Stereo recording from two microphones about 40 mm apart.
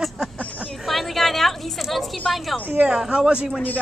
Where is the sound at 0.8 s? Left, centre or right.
Centre.